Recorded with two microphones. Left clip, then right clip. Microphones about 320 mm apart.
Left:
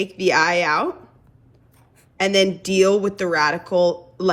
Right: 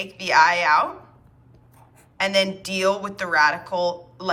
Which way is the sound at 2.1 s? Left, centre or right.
Centre.